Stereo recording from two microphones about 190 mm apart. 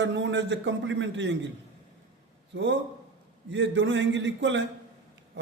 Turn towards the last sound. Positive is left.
turn(degrees=-70)  # may be behind; listen again after turning